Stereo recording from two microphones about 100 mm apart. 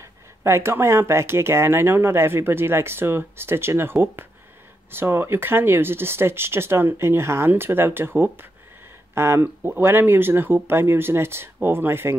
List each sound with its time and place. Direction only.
0.4 s speech: 25° right (ahead or behind)